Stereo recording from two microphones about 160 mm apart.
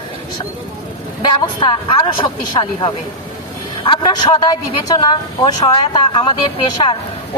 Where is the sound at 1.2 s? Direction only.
30° left (ahead or behind).